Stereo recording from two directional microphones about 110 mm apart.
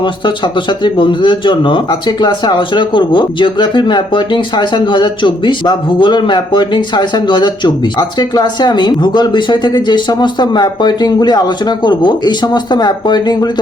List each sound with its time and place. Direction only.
0.9 s speech: 50° left (ahead or behind)